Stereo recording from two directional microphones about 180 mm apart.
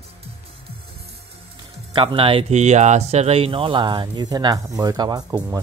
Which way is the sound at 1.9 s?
30° right (ahead or behind).